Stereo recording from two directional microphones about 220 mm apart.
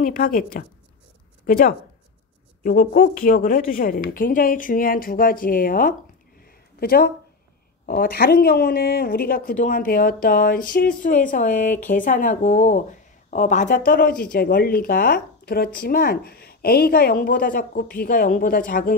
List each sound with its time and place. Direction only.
0.0 s speech: 40° left (ahead or behind)